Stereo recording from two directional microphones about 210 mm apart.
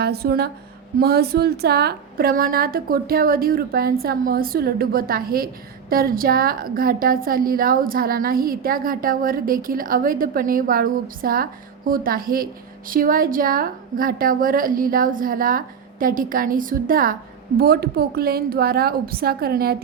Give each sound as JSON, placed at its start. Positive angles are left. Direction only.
{"t": 0.0, "sound": "a woman's voice", "side_deg": -50}